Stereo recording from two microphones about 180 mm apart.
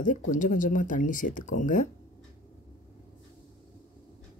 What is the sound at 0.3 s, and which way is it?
Speech, 45° left (ahead or behind).